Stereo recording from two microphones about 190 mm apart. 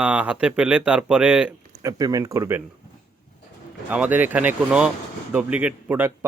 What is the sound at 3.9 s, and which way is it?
Speech, 10° right (ahead or behind).